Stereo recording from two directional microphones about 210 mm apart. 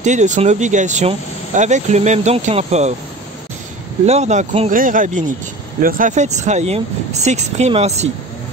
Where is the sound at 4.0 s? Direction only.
30° right (ahead or behind).